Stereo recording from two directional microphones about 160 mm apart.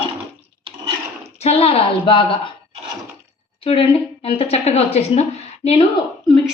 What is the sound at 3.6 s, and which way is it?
A woman's voice, 35° left (ahead or behind).